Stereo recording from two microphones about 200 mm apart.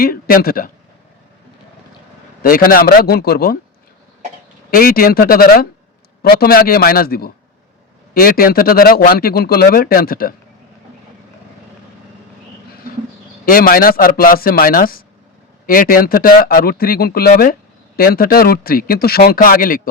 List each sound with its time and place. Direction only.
0.0 s speech: 45° left (ahead or behind)
2.4 s speech: 45° left (ahead or behind)
4.7 s speech: 45° left (ahead or behind)
13.4 s speech: 45° left (ahead or behind)